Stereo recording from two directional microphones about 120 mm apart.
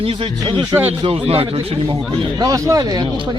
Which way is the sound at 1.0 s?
50° right (ahead or behind).